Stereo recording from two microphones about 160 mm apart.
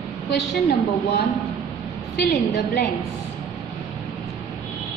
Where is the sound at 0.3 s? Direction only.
75° left (ahead or behind).